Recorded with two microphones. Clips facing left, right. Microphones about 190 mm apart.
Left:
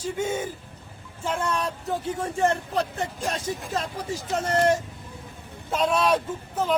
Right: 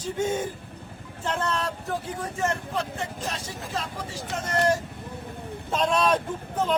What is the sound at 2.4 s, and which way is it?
Speech, 35° left (ahead or behind).